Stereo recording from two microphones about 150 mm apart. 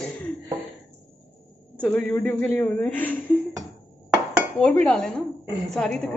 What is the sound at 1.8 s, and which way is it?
A woman's voice, 10° left (ahead or behind).